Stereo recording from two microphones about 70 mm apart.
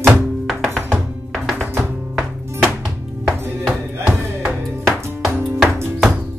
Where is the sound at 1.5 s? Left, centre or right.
Right.